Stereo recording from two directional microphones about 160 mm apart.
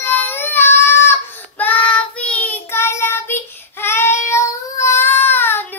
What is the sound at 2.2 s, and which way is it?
Child singing, 10° left (ahead or behind).